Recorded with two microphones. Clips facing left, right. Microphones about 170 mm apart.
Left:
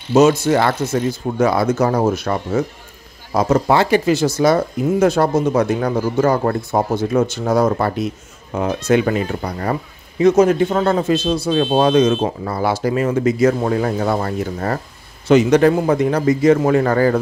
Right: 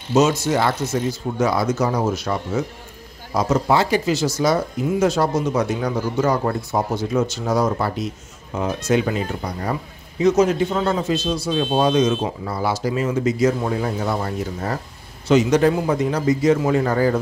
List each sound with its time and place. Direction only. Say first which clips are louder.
0.1 s speech: left 5 dB; 55° left (ahead or behind)